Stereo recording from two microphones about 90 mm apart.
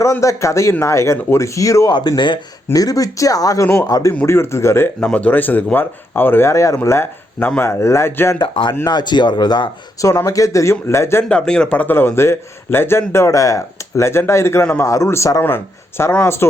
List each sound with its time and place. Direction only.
0.0 s speech: 35° left (ahead or behind)
1.9 s speech: 55° left (ahead or behind)
2.7 s speech: 40° left (ahead or behind)
4.3 s a man's voice: 30° left (ahead or behind)
5.0 s a man's voice: 15° left (ahead or behind)
8.4 s speech: 60° left (ahead or behind)
10.0 s speech: 35° left (ahead or behind)
11.3 s a man's voice: 10° left (ahead or behind); by 16.6 s 30° left (ahead or behind)